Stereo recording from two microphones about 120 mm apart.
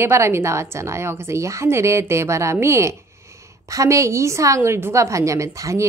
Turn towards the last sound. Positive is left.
turn(degrees=-25)  # may be behind; listen again after turning